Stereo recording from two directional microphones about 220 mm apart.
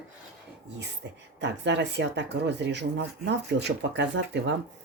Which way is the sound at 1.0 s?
50° right (ahead or behind).